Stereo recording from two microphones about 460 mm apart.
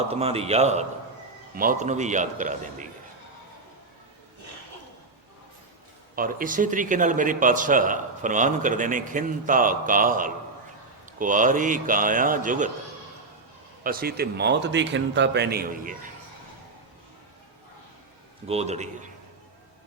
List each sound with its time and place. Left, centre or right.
0.1 s speech: centre
6.1 s speech: centre
13.8 s a man's voice: centre
18.4 s speech: centre